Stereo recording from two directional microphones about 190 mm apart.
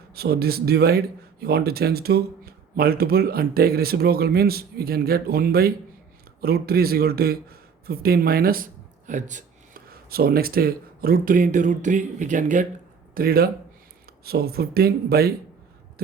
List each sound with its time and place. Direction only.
0.1 s a man's voice: 55° right (ahead or behind)
13.1 s speech: 50° right (ahead or behind)